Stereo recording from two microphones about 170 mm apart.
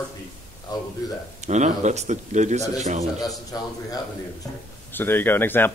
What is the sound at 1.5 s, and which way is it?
Speech, 45° right (ahead or behind).